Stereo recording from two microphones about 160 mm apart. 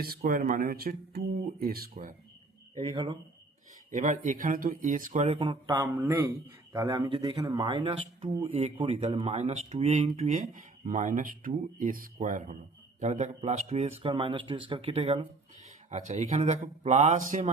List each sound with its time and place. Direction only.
0.3 s speech: 60° right (ahead or behind)
2.7 s speech: 35° right (ahead or behind)
3.9 s speech: 55° right (ahead or behind)